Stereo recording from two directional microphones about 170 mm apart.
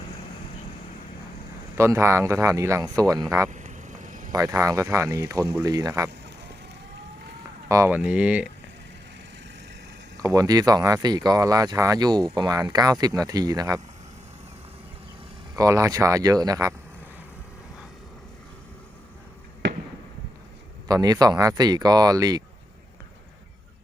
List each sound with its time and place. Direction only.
1.7 s speech: 15° right (ahead or behind)
3.5 s a sound: 45° right (ahead or behind)
4.3 s speech: 20° right (ahead or behind)
7.7 s speech: 15° right (ahead or behind)
10.2 s speech: 20° right (ahead or behind)
15.5 s speech: 20° right (ahead or behind)
19.6 s fireworks: 90° right
20.8 s speech: 20° right (ahead or behind)